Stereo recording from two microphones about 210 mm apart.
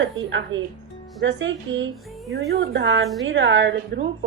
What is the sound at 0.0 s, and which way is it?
A woman's voice, 60° right (ahead or behind).